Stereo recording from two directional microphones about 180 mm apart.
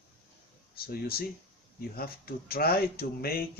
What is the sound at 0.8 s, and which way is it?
Speech, 60° left (ahead or behind).